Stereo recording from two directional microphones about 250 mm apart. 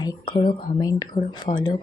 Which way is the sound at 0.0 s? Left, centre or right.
Centre.